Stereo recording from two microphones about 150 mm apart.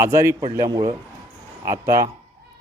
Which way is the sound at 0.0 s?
20° right (ahead or behind).